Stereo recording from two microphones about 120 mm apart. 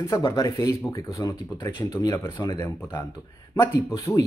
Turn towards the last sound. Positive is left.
turn(degrees=25)  # may be behind; listen again after turning